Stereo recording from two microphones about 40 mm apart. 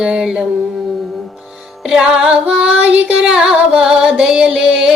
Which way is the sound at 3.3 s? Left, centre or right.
Centre.